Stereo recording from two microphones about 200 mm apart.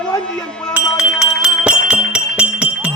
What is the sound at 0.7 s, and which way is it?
Speech, 5° right (ahead or behind).